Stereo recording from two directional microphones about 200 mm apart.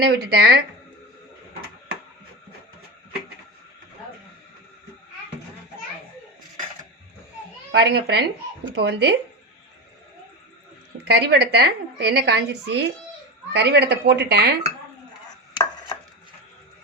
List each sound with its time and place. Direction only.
0.0 s a woman's voice: 50° right (ahead or behind)
7.7 s a woman's voice: 60° right (ahead or behind)
11.0 s a woman's voice: 55° right (ahead or behind)